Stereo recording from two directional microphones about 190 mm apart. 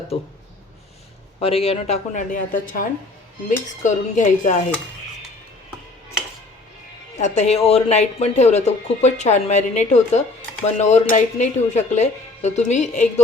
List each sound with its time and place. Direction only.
0.1 s speech: 30° left (ahead or behind)
1.4 s speech: 30° left (ahead or behind)
7.2 s speech: 35° left (ahead or behind)